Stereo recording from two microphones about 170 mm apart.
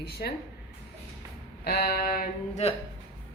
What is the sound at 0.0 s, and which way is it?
Speech, 65° left (ahead or behind).